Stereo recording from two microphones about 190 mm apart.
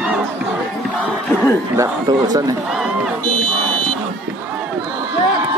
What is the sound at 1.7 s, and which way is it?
Speech, 15° right (ahead or behind).